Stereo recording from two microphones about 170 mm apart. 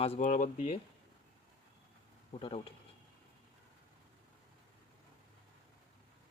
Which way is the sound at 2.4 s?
35° left (ahead or behind).